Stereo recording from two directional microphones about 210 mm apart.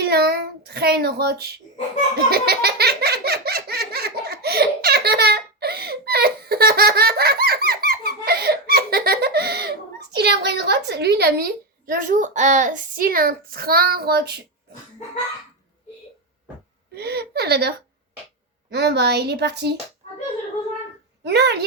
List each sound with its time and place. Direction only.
0.0 s child singing: 50° right (ahead or behind)
2.1 s laughter: 50° right (ahead or behind)
16.9 s a woman's voice: 50° right (ahead or behind)
21.2 s a woman's voice: 50° right (ahead or behind)